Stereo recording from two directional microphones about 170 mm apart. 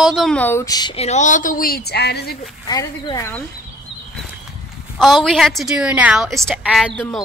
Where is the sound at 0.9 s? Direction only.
40° left (ahead or behind).